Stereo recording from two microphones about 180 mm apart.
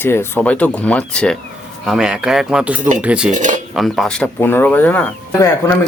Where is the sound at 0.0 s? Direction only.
15° left (ahead or behind); by 3.3 s 5° right (ahead or behind).